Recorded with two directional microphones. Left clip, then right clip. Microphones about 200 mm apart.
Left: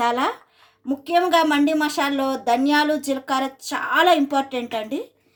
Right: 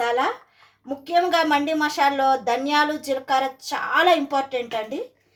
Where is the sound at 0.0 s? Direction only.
45° left (ahead or behind).